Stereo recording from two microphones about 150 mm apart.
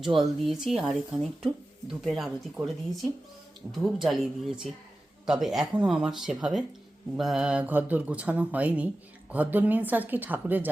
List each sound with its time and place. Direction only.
0.2 s speech: centre (ahead or behind)